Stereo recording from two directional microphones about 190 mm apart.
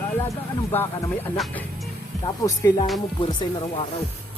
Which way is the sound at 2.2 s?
15° left (ahead or behind).